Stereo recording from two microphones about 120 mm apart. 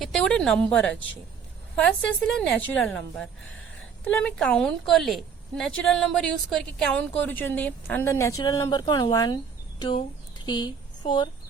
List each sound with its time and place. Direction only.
0.0 s a woman's voice: 5° left (ahead or behind); by 11.3 s 40° left (ahead or behind)